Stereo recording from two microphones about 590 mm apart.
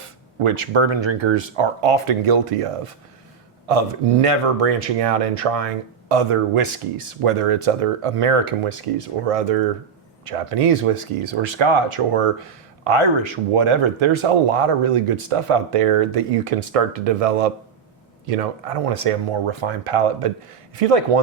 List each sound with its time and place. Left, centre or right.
0.3 s speech: right